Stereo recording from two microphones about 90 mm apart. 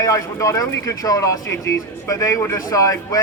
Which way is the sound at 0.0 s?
35° left (ahead or behind).